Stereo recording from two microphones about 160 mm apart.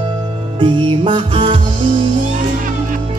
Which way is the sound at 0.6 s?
30° right (ahead or behind).